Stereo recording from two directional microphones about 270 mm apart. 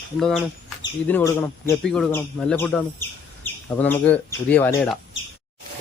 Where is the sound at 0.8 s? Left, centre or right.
Centre.